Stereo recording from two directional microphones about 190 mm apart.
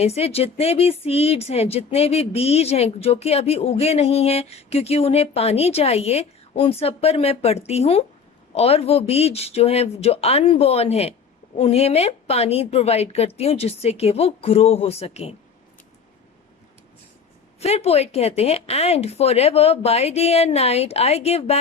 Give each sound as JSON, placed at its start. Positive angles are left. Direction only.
{"t": 0.0, "sound": "speech", "side_deg": 35}
{"t": 17.6, "sound": "speech", "side_deg": 35}